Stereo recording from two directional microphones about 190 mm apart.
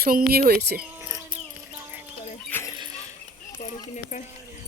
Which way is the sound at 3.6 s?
40° left (ahead or behind).